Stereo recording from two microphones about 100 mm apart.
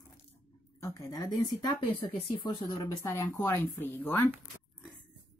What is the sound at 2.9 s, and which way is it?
Speech, 30° left (ahead or behind).